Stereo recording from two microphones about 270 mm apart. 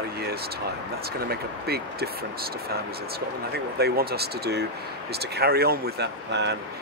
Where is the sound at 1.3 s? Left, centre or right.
Right.